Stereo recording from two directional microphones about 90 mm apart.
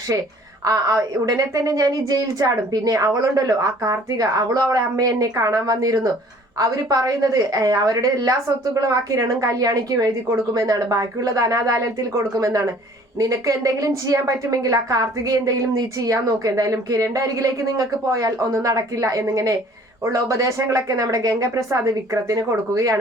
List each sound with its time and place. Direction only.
0.6 s a woman's voice: 40° right (ahead or behind)